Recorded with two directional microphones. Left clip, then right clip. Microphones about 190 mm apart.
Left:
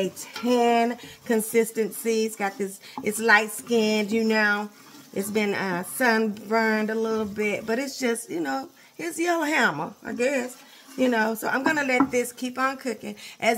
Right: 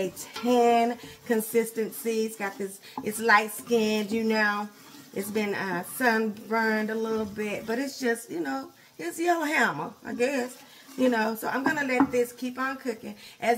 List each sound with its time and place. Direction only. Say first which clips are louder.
0.0 s a woman's voice: left 2 dB; 40° left (ahead or behind)